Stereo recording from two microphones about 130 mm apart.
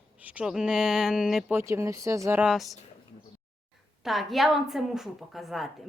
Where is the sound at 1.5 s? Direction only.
20° right (ahead or behind).